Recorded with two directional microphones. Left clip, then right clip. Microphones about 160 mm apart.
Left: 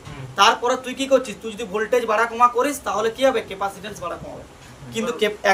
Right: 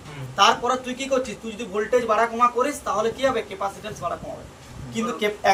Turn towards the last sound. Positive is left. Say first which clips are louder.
# left 2 dB
turn(degrees=90)